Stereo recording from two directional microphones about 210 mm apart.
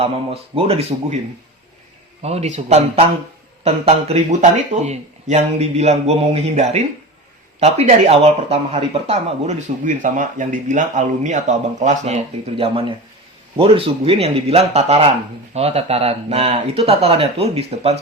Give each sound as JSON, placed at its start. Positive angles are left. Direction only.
{"t": 0.0, "sound": "speech", "side_deg": -30}
{"t": 2.2, "sound": "speech", "side_deg": -30}